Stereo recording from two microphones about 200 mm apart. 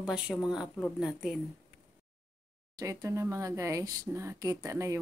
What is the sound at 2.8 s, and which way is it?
Speech, 15° right (ahead or behind).